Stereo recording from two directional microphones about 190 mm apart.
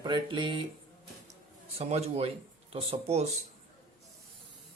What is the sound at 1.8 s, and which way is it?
Speech, 35° right (ahead or behind).